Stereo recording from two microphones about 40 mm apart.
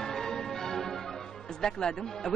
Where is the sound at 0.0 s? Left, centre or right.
Centre.